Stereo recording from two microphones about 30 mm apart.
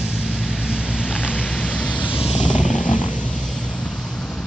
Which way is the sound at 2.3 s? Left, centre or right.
Left.